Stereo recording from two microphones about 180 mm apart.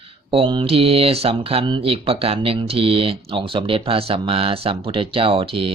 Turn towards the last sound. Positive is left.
turn(degrees=-30)  # may be behind; listen again after turning